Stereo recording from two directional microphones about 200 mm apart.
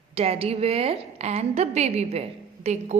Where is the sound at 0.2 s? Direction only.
30° right (ahead or behind).